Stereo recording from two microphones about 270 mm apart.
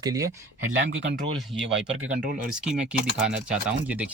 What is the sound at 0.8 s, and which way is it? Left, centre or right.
Speech, right.